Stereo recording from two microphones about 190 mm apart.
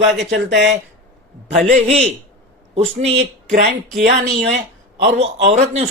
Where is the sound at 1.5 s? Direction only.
40° right (ahead or behind).